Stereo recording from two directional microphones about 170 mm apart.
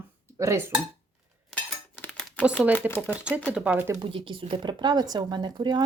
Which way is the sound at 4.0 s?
30° right (ahead or behind).